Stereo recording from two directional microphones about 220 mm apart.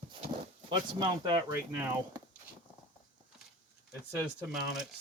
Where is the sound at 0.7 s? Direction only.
20° right (ahead or behind).